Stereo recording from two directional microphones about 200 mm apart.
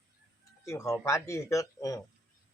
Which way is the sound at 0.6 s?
15° left (ahead or behind).